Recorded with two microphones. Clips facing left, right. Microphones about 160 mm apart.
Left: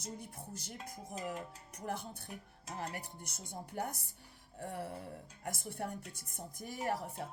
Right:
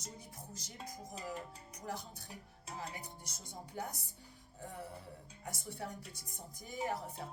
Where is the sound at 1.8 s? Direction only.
55° left (ahead or behind).